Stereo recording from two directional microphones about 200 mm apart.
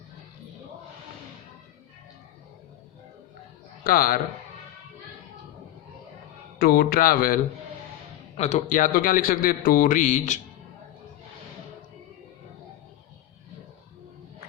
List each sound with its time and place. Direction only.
3.8 s a man's voice: 45° left (ahead or behind)
6.6 s a man's voice: 50° left (ahead or behind)
8.4 s a man's voice: 35° left (ahead or behind)